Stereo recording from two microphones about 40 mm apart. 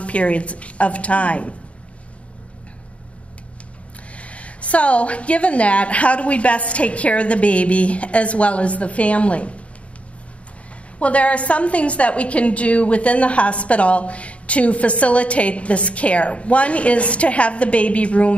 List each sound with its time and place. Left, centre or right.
0.0 s a woman's voice: left
4.1 s a woman's voice: left
11.0 s a woman's voice: left